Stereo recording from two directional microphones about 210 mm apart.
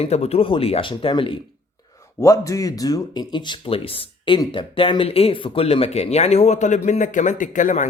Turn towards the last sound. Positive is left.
turn(degrees=35)  # may be behind; listen again after turning